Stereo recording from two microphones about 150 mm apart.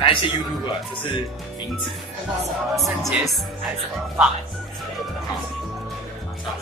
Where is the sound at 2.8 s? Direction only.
Centre (ahead or behind).